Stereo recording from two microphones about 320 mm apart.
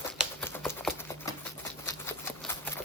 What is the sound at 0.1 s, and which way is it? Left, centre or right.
Typewriter, centre.